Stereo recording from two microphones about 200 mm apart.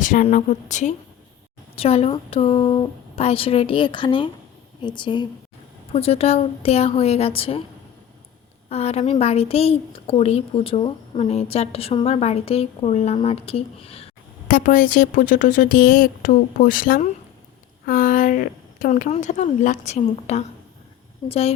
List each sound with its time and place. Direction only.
0.0 s a woman's voice: 40° left (ahead or behind)
8.7 s a woman's voice: 30° left (ahead or behind)
14.4 s a woman's voice: 45° left (ahead or behind)